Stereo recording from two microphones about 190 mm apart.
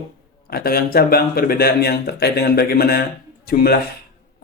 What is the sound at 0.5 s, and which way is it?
Speech, 50° left (ahead or behind).